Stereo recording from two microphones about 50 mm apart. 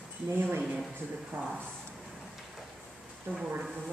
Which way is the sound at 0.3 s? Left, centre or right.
Right.